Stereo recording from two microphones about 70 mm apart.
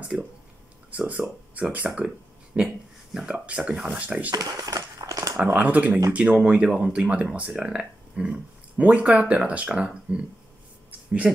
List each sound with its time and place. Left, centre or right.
0.1 s speech: right
4.3 s speech: right
4.9 s crumpling: right
5.4 s speech: right
10.9 s a sound: centre